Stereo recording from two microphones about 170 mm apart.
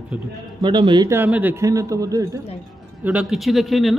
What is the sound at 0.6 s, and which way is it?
Speech, 25° right (ahead or behind).